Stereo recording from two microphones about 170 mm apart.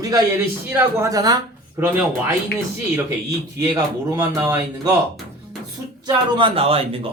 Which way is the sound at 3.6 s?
25° right (ahead or behind).